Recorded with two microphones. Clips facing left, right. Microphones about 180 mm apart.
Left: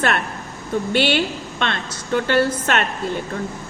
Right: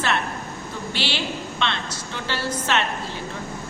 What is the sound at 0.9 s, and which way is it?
A woman's voice, 55° left (ahead or behind).